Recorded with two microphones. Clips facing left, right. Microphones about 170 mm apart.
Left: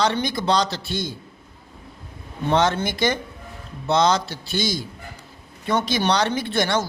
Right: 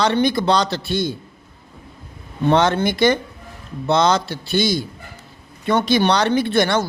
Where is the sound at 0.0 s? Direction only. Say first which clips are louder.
Right 5 dB; 60° right (ahead or behind).